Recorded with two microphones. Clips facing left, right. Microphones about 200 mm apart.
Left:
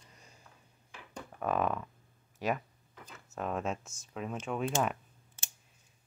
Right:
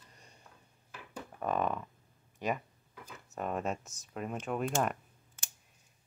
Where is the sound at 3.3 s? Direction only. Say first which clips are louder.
Even; centre (ahead or behind).